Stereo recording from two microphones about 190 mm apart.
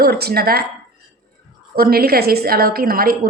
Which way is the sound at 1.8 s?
50° right (ahead or behind).